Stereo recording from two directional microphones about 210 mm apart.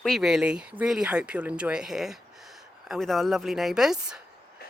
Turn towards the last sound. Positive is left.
turn(degrees=0)  # may be behind; listen again after turning